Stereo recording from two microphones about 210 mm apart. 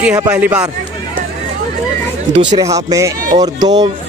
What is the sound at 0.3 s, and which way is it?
Speech, 5° right (ahead or behind).